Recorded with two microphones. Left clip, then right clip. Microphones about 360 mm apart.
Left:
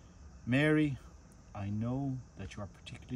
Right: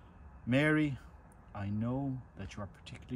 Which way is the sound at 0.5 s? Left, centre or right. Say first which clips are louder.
Even; centre.